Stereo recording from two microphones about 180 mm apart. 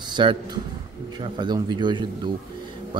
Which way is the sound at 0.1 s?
25° right (ahead or behind).